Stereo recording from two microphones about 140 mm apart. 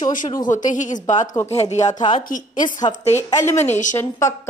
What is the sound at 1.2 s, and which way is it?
Speech, 25° left (ahead or behind).